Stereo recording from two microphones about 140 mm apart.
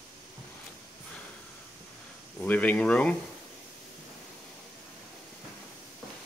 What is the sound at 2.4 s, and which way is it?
Speech, 10° left (ahead or behind).